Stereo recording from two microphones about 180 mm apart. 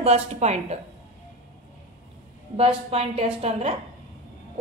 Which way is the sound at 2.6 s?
35° right (ahead or behind).